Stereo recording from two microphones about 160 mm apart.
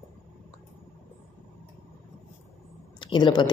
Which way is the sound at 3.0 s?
30° left (ahead or behind).